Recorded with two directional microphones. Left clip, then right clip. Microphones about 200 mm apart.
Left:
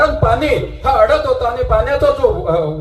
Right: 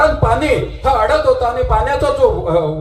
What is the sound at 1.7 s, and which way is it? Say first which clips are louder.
Speech: left 4 dB; 45° left (ahead or behind).